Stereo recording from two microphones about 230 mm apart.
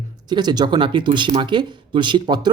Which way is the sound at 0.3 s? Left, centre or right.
Centre.